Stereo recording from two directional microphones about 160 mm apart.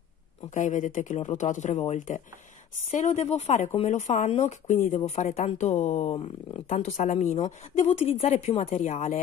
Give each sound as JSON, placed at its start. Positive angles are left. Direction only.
{"t": 0.6, "sound": "speech", "side_deg": 50}